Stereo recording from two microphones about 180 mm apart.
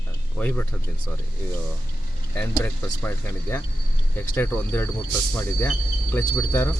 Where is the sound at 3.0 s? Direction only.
10° left (ahead or behind).